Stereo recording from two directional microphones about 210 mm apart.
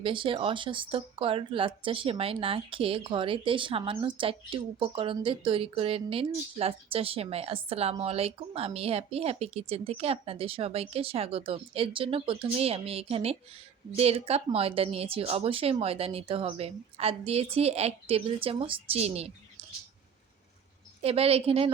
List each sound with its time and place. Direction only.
0.0 s speech: 25° right (ahead or behind)
21.0 s speech: 30° right (ahead or behind)